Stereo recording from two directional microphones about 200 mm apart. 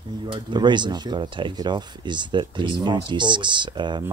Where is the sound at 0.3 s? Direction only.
20° right (ahead or behind).